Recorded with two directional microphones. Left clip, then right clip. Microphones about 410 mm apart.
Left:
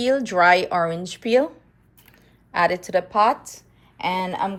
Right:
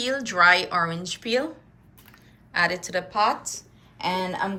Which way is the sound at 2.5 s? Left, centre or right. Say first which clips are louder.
Left 4 dB; centre.